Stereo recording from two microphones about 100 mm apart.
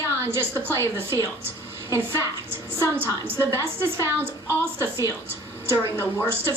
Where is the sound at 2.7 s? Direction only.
20° right (ahead or behind).